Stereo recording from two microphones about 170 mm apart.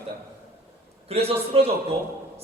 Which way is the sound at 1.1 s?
35° right (ahead or behind).